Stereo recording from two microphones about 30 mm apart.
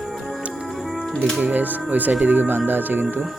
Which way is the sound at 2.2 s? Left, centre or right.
Right.